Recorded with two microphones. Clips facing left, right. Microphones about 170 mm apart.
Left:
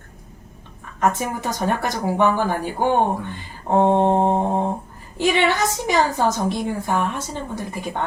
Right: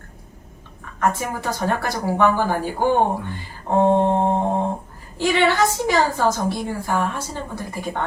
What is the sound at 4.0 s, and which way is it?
Speech, 20° left (ahead or behind).